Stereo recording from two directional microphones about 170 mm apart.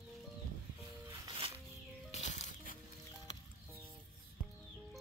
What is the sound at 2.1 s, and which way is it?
Music, 40° left (ahead or behind).